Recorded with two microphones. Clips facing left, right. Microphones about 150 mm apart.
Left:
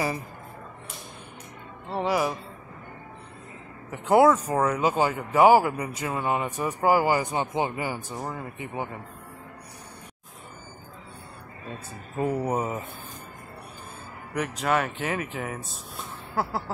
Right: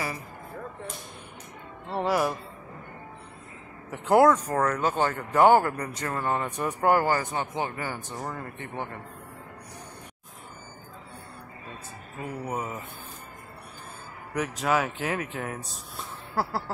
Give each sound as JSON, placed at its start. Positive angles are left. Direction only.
{"t": 1.9, "sound": "speech", "side_deg": 0}
{"t": 3.9, "sound": "speech", "side_deg": 0}
{"t": 12.2, "sound": "speech", "side_deg": 30}
{"t": 14.3, "sound": "speech", "side_deg": 0}